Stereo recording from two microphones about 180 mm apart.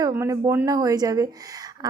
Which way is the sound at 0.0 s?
15° right (ahead or behind).